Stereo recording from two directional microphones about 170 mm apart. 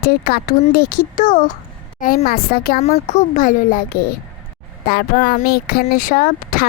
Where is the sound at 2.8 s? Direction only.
40° left (ahead or behind).